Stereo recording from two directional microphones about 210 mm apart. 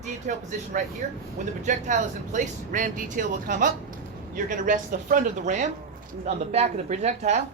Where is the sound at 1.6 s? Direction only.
35° right (ahead or behind).